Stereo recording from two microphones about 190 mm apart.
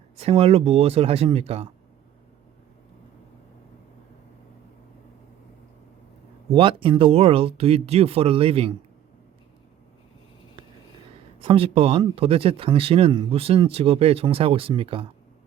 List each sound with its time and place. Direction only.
0.2 s speech: 30° right (ahead or behind)
6.5 s speech: 25° right (ahead or behind)
11.4 s speech: 30° right (ahead or behind)